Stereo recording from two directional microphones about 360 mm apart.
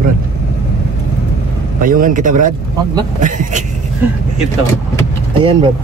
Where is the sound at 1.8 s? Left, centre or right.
Right.